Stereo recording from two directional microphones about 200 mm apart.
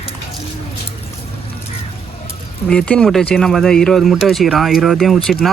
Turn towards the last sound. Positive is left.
turn(degrees=0)  # may be behind; listen again after turning